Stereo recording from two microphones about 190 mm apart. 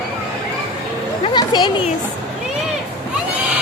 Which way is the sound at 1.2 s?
25° left (ahead or behind).